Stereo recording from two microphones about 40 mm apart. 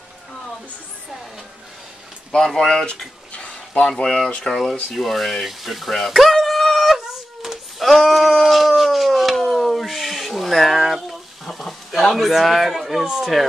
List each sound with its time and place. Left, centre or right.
2.3 s speech: centre
4.4 s speech: centre
4.9 s a sound: centre
11.4 s a man's voice: centre